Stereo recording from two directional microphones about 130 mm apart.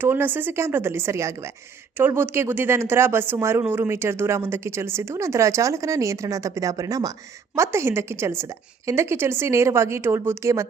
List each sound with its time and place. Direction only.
0.0 s speech: 15° right (ahead or behind)